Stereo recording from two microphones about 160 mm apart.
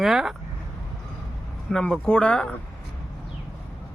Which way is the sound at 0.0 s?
Centre (ahead or behind).